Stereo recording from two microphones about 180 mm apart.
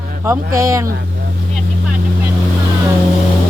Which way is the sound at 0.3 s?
15° right (ahead or behind).